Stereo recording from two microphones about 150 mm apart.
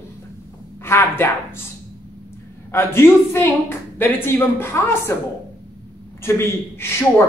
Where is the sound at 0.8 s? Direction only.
15° left (ahead or behind).